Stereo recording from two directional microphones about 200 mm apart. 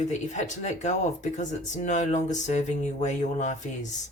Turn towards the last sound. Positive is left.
turn(degrees=35)  # may be behind; listen again after turning